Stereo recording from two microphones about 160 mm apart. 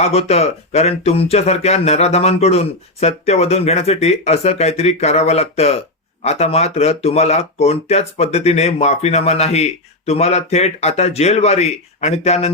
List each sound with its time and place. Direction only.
0.0 s speech: 40° left (ahead or behind)